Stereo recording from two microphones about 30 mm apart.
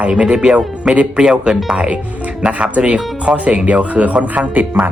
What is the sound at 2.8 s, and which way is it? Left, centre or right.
Speech, right.